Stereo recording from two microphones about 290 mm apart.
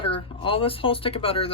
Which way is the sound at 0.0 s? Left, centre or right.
Centre.